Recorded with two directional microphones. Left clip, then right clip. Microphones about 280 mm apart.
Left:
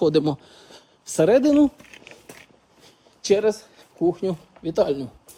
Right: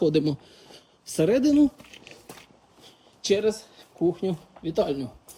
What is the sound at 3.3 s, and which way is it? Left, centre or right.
A man's voice, centre.